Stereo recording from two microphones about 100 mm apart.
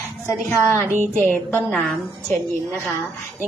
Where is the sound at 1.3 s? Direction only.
10° left (ahead or behind).